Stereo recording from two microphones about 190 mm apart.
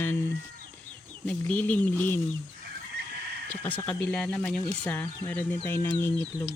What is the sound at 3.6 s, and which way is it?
Speech, 10° left (ahead or behind).